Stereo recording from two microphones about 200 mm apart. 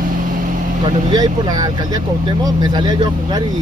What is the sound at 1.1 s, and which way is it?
Speech, 20° right (ahead or behind).